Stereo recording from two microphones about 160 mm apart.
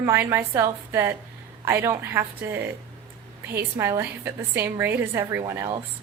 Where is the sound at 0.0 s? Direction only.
15° right (ahead or behind).